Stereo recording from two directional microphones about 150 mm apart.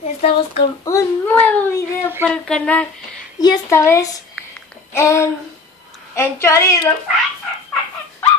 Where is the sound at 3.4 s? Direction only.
25° left (ahead or behind).